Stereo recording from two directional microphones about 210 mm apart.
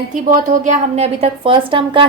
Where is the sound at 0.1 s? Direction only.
40° right (ahead or behind).